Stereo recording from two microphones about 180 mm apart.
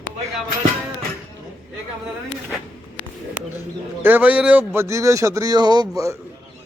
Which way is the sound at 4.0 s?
10° right (ahead or behind).